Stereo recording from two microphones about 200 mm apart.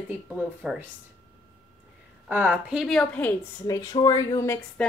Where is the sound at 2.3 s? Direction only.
10° right (ahead or behind); by 4.6 s 15° left (ahead or behind).